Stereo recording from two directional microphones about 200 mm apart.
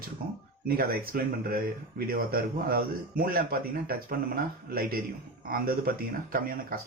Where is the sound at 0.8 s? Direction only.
50° right (ahead or behind).